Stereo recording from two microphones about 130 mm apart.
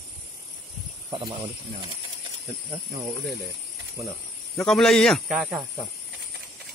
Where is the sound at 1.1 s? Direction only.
40° right (ahead or behind).